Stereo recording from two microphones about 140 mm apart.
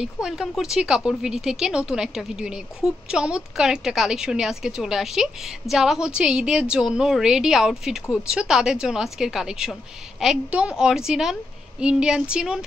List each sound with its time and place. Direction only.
0.0 s speech: 5° right (ahead or behind)